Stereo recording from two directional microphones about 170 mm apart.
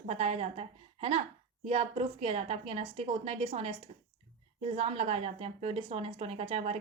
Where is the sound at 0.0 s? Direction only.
40° right (ahead or behind).